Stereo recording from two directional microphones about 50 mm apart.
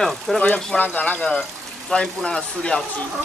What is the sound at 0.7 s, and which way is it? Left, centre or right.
Speech, left.